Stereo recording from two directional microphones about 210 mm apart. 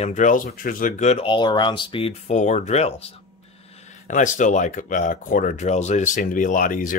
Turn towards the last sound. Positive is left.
turn(degrees=40)  # may be behind; listen again after turning